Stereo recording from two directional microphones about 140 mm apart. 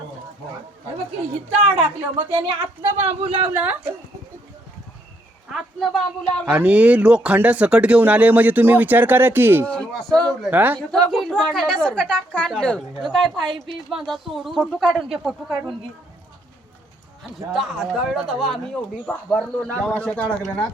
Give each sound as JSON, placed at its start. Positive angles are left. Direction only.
{"t": 1.5, "sound": "speech", "side_deg": -40}
{"t": 3.5, "sound": "speech", "side_deg": -10}
{"t": 5.5, "sound": "speech", "side_deg": 0}
{"t": 6.4, "sound": "speech", "side_deg": -10}
{"t": 9.6, "sound": "speech", "side_deg": 5}
{"t": 10.5, "sound": "speech", "side_deg": -10}
{"t": 11.1, "sound": "speech", "side_deg": 5}
{"t": 17.3, "sound": "speech", "side_deg": 0}